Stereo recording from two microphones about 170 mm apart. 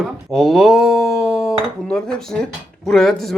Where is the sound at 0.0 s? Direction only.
Centre (ahead or behind).